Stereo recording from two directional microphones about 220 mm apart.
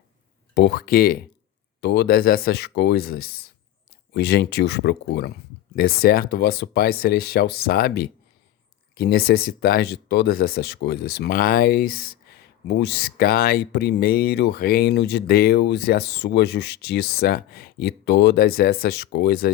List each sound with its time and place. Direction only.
0.5 s speech: 50° left (ahead or behind)